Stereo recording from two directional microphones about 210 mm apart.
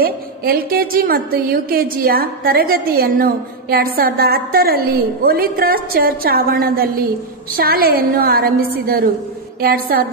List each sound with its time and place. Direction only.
0.0 s a woman's voice: 45° right (ahead or behind)